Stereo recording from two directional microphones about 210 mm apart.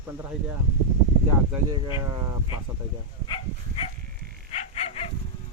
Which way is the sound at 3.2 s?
20° left (ahead or behind).